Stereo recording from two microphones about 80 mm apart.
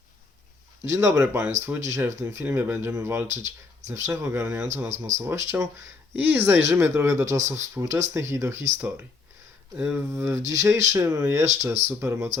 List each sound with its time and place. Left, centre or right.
0.9 s speech: right
6.2 s speech: right
9.7 s speech: centre
10.1 s speech: right